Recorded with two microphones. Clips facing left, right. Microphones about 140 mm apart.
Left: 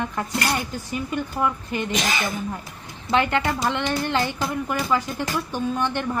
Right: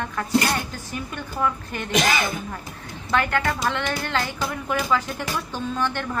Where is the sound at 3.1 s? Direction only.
20° left (ahead or behind).